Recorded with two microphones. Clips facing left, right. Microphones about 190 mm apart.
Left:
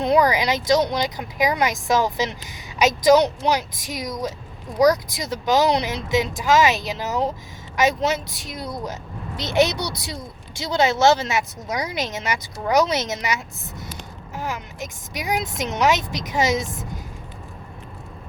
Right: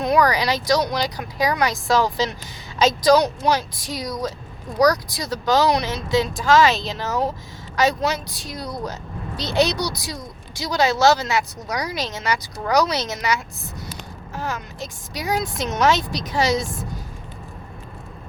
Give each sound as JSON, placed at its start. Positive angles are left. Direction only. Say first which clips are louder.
{"t": 0.0, "sound": "a woman's voice", "louder": "left 1 dB", "side_deg": 25}